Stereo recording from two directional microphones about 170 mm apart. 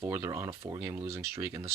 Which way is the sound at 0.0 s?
15° right (ahead or behind).